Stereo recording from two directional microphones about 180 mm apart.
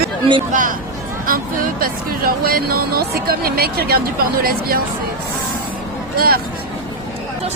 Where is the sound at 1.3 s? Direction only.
55° right (ahead or behind).